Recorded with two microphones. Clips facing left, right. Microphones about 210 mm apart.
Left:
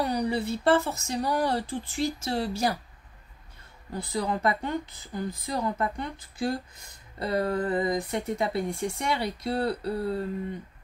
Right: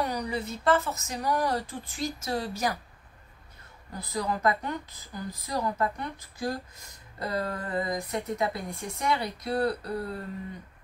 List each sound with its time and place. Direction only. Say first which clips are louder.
0.0 s speech: left 4 dB; 30° left (ahead or behind)
4.0 s speech: left 1 dB; 25° left (ahead or behind)